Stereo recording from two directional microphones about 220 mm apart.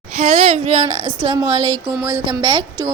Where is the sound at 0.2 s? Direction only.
30° right (ahead or behind).